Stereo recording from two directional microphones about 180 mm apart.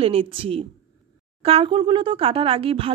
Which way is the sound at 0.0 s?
30° right (ahead or behind).